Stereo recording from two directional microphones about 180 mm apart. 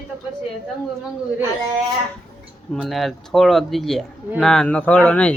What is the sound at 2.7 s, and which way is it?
Speech, centre (ahead or behind).